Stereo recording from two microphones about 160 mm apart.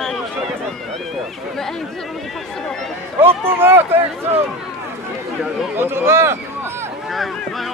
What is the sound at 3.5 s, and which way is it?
Speech, 15° right (ahead or behind).